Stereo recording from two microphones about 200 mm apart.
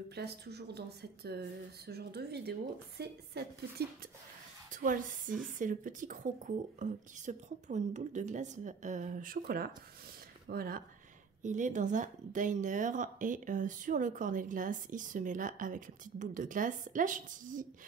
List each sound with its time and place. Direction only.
0.1 s a woman's voice: 55° right (ahead or behind)
4.6 s a woman's voice: 40° right (ahead or behind)